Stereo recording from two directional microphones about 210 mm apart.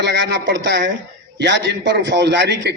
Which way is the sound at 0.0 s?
55° right (ahead or behind).